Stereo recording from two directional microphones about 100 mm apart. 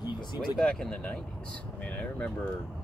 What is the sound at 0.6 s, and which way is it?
Speech, 10° left (ahead or behind).